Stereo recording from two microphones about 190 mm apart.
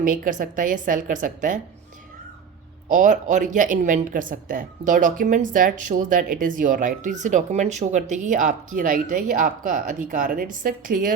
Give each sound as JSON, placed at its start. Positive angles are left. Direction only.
{"t": 0.0, "sound": "a woman's voice", "side_deg": -45}
{"t": 2.9, "sound": "a woman's voice", "side_deg": -40}